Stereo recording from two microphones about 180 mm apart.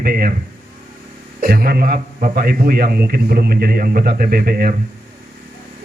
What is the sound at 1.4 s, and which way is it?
A man's voice, 55° right (ahead or behind).